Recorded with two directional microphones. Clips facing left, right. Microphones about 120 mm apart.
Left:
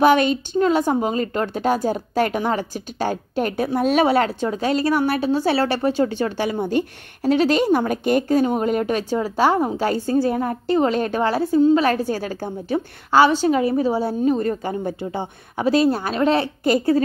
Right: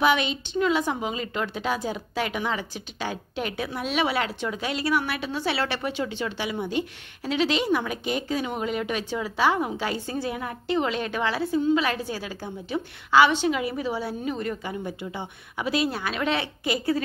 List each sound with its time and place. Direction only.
0.0 s a woman's voice: 45° left (ahead or behind)